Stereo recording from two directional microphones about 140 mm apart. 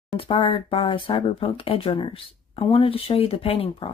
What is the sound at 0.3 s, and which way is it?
Speech, 40° left (ahead or behind).